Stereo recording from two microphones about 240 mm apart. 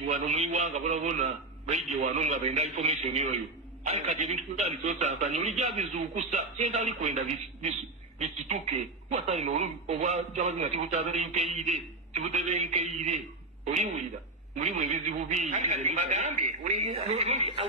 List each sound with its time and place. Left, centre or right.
0.0 s speech: right